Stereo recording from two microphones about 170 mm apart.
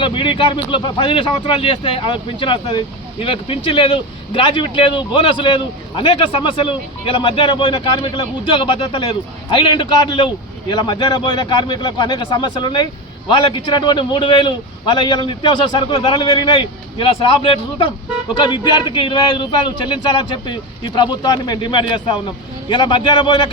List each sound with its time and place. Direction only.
0.0 s speech: 30° left (ahead or behind)